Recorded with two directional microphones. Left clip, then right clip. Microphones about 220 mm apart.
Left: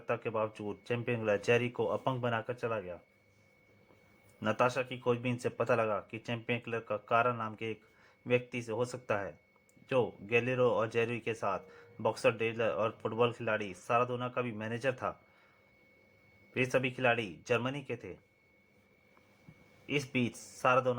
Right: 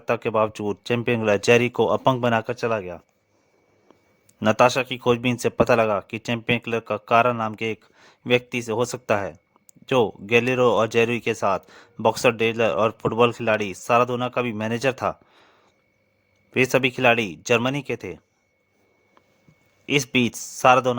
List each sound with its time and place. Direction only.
0.0 s speech: 50° right (ahead or behind)
4.4 s speech: 45° right (ahead or behind)
16.5 s speech: 50° right (ahead or behind)
19.8 s speech: 50° right (ahead or behind)